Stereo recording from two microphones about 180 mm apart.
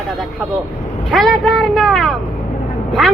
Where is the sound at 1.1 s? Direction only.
Centre (ahead or behind).